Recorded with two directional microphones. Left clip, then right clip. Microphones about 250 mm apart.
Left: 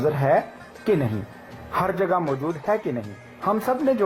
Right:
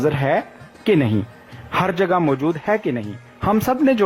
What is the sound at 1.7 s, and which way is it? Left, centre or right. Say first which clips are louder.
Speech: right 4 dB; right.